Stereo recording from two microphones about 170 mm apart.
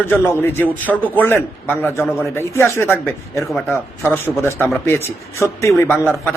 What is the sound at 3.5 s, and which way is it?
Speech, 5° left (ahead or behind).